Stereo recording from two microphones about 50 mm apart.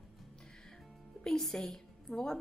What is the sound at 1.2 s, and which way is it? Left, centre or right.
A woman's voice, centre.